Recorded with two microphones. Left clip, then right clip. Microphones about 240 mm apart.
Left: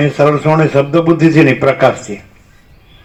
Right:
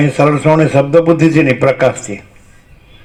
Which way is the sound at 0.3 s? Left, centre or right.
Right.